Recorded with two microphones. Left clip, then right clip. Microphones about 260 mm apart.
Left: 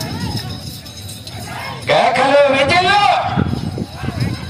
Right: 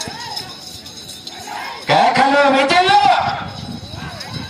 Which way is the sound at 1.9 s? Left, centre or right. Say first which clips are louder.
Left 1 dB; left.